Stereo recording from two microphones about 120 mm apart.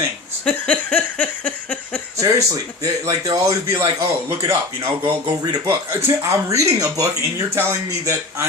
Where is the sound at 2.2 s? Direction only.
30° right (ahead or behind).